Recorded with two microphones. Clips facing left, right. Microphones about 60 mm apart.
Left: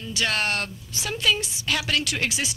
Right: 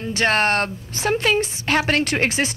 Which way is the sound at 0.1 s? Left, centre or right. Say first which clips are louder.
Right 7 dB; right.